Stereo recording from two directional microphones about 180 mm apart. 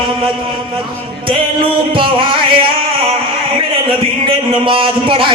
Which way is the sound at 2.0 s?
30° right (ahead or behind).